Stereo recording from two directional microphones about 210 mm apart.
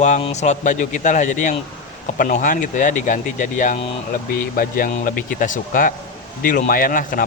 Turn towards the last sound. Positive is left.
turn(degrees=40)  # may be behind; listen again after turning